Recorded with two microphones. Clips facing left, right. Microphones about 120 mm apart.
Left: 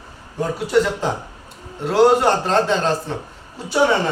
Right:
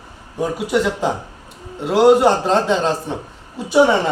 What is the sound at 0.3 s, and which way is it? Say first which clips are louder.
A man's voice: left 1 dB; 10° right (ahead or behind).